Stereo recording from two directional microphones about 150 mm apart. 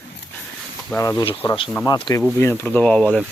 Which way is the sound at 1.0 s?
25° left (ahead or behind).